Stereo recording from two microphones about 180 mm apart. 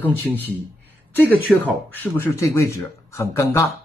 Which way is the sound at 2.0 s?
15° left (ahead or behind).